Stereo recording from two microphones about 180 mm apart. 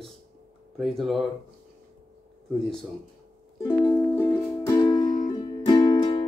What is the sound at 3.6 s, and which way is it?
Music, 10° left (ahead or behind).